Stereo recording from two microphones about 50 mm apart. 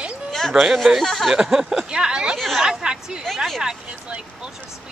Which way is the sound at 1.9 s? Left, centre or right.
Centre.